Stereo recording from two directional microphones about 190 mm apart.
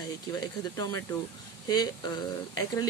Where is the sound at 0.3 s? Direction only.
20° left (ahead or behind).